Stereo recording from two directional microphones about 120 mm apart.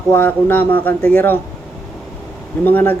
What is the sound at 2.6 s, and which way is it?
Speech, 15° left (ahead or behind).